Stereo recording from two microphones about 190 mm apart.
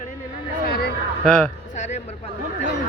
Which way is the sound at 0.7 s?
55° left (ahead or behind).